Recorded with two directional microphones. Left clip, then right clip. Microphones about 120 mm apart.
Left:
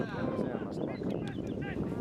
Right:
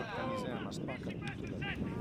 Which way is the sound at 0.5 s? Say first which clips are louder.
Left 5 dB; 20° right (ahead or behind).